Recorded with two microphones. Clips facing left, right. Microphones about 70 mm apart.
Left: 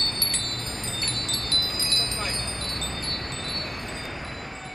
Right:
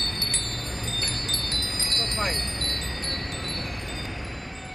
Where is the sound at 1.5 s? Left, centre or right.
Right.